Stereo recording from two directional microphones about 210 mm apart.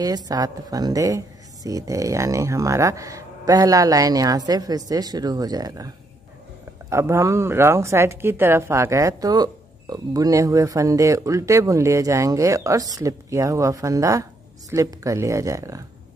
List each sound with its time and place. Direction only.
0.0 s speech: 15° right (ahead or behind)
6.9 s speech: 15° right (ahead or behind)